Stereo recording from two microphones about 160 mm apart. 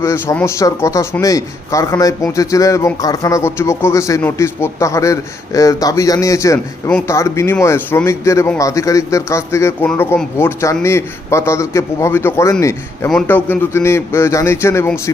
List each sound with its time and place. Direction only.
0.0 s a man's voice: 15° left (ahead or behind)